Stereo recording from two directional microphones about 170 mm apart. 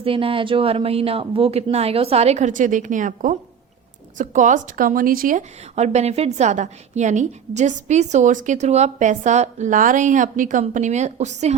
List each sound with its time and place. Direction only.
0.0 s a woman's voice: 30° right (ahead or behind)